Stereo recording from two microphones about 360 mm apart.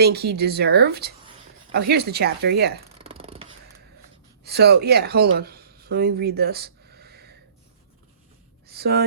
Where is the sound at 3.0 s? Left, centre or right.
Centre.